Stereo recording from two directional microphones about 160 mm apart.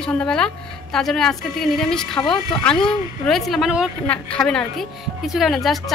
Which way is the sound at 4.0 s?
10° left (ahead or behind).